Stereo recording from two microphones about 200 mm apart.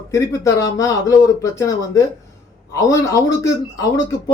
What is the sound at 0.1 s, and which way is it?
Speech, 15° left (ahead or behind).